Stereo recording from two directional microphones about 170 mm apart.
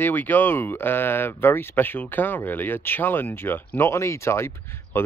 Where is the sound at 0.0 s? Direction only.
10° left (ahead or behind).